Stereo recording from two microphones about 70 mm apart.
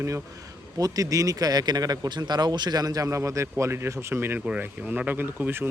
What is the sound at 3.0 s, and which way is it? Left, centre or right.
Speech, right.